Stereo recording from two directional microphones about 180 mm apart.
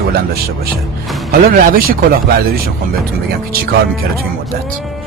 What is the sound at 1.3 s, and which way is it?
Speech, 50° right (ahead or behind).